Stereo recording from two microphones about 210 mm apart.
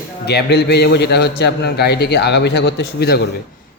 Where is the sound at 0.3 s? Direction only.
50° left (ahead or behind).